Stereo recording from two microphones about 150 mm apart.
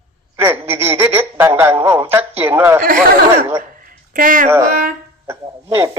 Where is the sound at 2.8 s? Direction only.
80° right.